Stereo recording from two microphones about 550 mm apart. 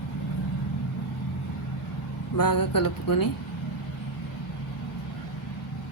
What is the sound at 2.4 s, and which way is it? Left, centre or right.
Speech, left.